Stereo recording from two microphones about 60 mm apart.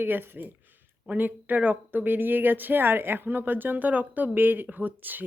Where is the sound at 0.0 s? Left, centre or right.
Right.